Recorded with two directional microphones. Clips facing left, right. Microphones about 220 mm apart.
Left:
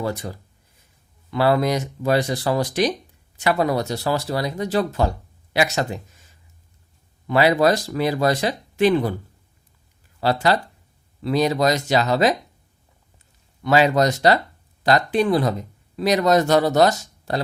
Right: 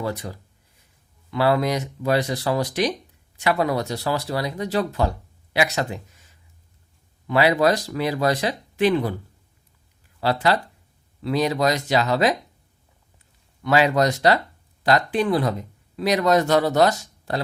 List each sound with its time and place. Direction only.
0.1 s speech: 45° left (ahead or behind)
2.2 s speech: 30° left (ahead or behind)
2.6 s speech: 45° left (ahead or behind)
3.5 s speech: 35° left (ahead or behind)
4.4 s speech: 40° left (ahead or behind)
7.3 s speech: 40° left (ahead or behind)
10.3 s speech: 45° left (ahead or behind)
13.7 s speech: 30° left (ahead or behind)